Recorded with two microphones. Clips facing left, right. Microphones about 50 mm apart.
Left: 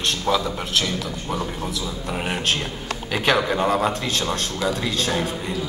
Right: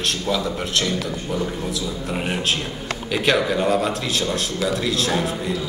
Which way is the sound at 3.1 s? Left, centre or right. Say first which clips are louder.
Right 1 dB; centre.